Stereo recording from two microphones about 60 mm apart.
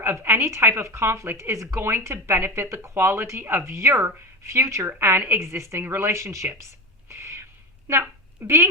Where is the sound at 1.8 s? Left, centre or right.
Right.